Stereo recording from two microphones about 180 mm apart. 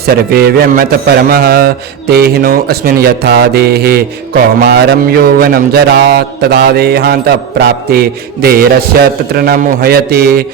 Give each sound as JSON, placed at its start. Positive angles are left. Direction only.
{"t": 0.0, "sound": "speech", "side_deg": -60}